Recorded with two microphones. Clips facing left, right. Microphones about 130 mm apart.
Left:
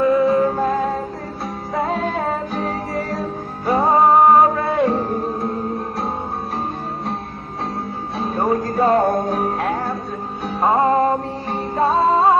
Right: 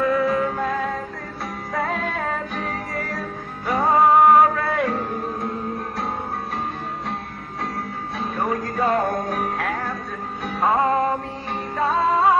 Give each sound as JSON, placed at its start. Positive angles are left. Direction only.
{"t": 0.0, "sound": "music", "side_deg": 25}
{"t": 8.2, "sound": "music", "side_deg": 30}